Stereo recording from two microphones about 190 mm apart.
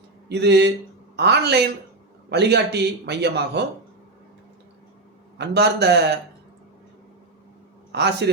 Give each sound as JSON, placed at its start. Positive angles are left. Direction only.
{"t": 0.3, "sound": "a man's voice", "side_deg": -60}
{"t": 5.4, "sound": "a man's voice", "side_deg": -60}
{"t": 7.9, "sound": "a man's voice", "side_deg": -65}